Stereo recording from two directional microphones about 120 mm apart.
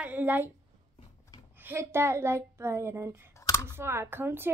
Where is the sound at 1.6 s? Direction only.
20° right (ahead or behind).